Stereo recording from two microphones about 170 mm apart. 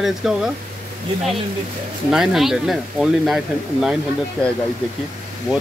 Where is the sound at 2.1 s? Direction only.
Centre (ahead or behind).